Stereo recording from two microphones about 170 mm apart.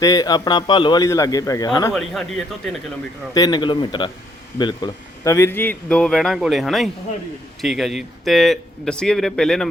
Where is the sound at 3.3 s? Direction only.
25° left (ahead or behind).